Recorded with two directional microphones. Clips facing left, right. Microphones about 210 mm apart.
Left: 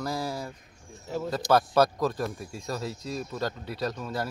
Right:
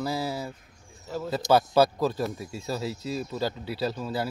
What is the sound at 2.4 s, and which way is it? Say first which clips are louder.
Speech: right 2 dB; 25° right (ahead or behind).